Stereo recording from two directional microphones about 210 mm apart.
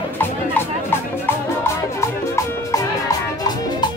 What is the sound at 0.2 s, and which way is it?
Music, 10° left (ahead or behind).